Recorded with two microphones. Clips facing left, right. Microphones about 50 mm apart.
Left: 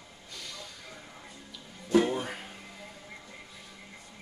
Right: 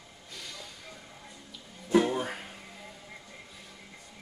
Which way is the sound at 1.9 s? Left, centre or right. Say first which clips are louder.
Even; centre.